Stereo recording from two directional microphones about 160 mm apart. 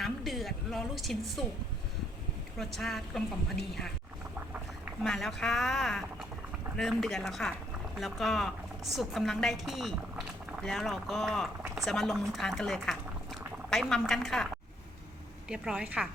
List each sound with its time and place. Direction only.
0.0 s a woman's voice: centre (ahead or behind)
2.6 s a woman's voice: centre (ahead or behind)
5.0 s a woman's voice: centre (ahead or behind)
11.6 s a sound: 15° right (ahead or behind)
11.9 s a woman's voice: centre (ahead or behind)
15.4 s a woman's voice: 5° right (ahead or behind)